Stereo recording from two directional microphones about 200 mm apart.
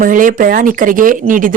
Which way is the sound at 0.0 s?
40° right (ahead or behind).